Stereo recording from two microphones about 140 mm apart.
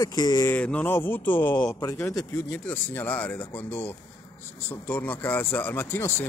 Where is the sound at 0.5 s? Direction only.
10° left (ahead or behind).